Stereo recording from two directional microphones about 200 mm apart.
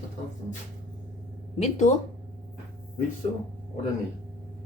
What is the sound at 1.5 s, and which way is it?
Speech, 35° left (ahead or behind).